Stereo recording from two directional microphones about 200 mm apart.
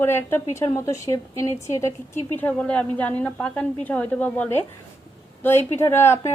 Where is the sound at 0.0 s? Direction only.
10° left (ahead or behind).